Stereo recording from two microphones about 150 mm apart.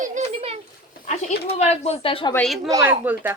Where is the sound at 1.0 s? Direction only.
45° left (ahead or behind).